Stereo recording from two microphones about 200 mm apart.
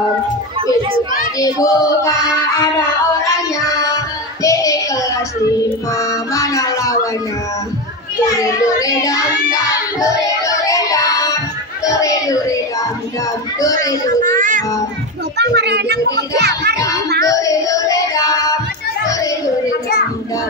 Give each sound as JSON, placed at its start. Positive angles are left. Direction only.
{"t": 0.6, "sound": "children playing", "side_deg": -25}
{"t": 1.4, "sound": "child singing", "side_deg": 15}
{"t": 3.5, "sound": "child singing", "side_deg": 15}
{"t": 5.9, "sound": "music", "side_deg": 15}
{"t": 8.4, "sound": "child singing", "side_deg": 15}
{"t": 11.8, "sound": "music", "side_deg": 15}
{"t": 14.2, "sound": "a sound", "side_deg": -40}
{"t": 15.3, "sound": "a sound", "side_deg": -55}
{"t": 17.2, "sound": "music", "side_deg": 15}
{"t": 19.0, "sound": "chatter", "side_deg": 15}